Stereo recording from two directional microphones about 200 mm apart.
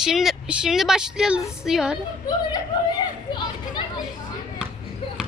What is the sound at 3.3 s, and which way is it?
Speech, 20° left (ahead or behind).